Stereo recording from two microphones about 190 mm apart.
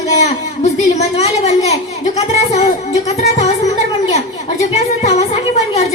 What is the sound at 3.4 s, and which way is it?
Music, 35° left (ahead or behind).